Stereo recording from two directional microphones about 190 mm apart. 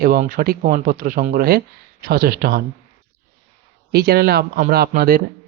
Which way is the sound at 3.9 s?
55° right (ahead or behind).